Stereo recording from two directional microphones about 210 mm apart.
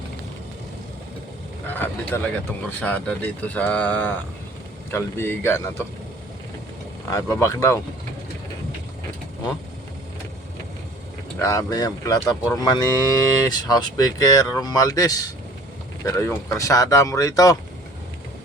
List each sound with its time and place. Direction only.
1.6 s vehicle: 10° left (ahead or behind)
2.1 s cattle: 10° left (ahead or behind)
7.1 s cattle: 15° left (ahead or behind)
11.3 s cattle: 15° left (ahead or behind)